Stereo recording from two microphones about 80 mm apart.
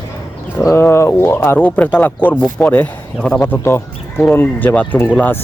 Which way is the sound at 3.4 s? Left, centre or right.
Left.